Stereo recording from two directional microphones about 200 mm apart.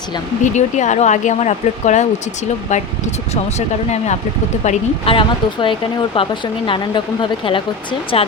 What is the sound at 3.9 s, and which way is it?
Speech, 35° left (ahead or behind).